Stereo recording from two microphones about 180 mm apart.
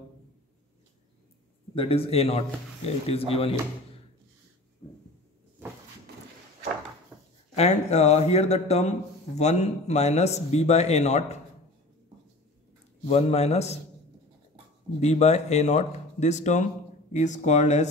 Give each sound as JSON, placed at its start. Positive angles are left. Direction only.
{"t": 1.8, "sound": "a man's voice", "side_deg": 30}
{"t": 7.5, "sound": "a man's voice", "side_deg": 35}
{"t": 13.0, "sound": "a man's voice", "side_deg": 35}
{"t": 15.0, "sound": "a man's voice", "side_deg": 35}